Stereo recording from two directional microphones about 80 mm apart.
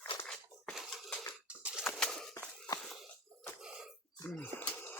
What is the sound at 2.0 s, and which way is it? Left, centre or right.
Bird, centre.